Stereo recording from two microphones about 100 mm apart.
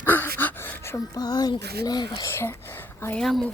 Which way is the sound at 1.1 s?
40° left (ahead or behind).